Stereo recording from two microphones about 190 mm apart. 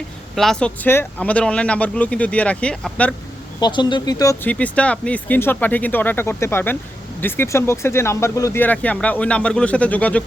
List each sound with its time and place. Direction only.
0.3 s speech: 5° left (ahead or behind)
3.6 s speech: 25° left (ahead or behind)
4.4 s speech: 5° left (ahead or behind)